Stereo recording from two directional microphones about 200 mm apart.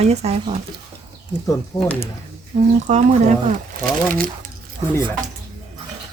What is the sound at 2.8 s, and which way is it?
Speech, 35° right (ahead or behind).